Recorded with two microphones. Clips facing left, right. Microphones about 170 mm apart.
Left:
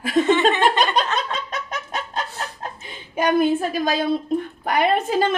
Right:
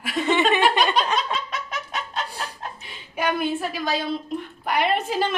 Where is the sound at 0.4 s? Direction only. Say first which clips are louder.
Left 1 dB; 15° right (ahead or behind).